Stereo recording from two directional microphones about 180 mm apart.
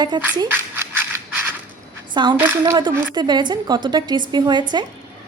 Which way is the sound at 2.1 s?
25° right (ahead or behind).